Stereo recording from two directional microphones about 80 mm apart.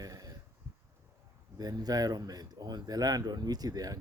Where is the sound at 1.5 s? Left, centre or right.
Right.